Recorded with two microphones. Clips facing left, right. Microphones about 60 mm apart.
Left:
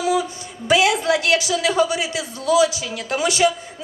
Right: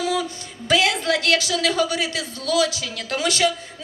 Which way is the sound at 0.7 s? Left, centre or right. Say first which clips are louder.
Left 3 dB; centre.